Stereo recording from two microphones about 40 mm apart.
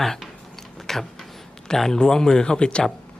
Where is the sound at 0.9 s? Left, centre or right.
Centre.